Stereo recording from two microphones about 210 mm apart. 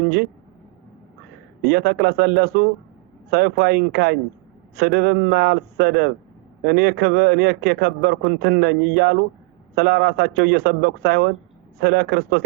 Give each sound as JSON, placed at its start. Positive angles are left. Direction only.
{"t": 1.6, "sound": "a man's voice", "side_deg": -50}